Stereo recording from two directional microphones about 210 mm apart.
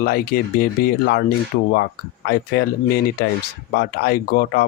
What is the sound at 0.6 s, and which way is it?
Speech, 45° left (ahead or behind).